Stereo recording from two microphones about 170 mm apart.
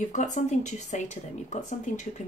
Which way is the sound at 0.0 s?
45° left (ahead or behind).